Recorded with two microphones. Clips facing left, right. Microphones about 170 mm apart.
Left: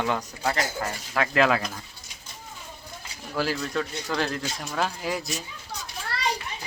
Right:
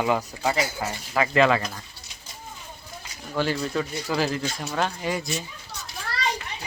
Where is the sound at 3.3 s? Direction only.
Centre (ahead or behind).